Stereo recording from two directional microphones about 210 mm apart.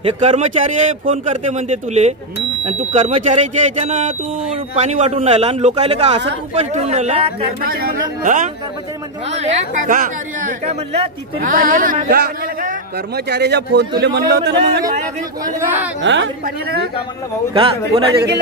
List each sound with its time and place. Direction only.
0.0 s speech: 30° right (ahead or behind)
7.6 s speech: 45° right (ahead or behind)
11.3 s a man's voice: 40° right (ahead or behind)
16.0 s a woman's voice: 60° right (ahead or behind)
17.6 s speech: 25° right (ahead or behind)